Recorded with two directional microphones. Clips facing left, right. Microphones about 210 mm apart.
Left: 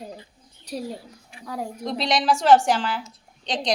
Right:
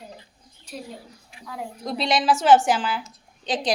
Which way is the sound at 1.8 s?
Centre (ahead or behind).